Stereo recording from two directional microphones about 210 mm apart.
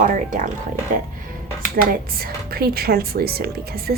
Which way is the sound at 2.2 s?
45° right (ahead or behind).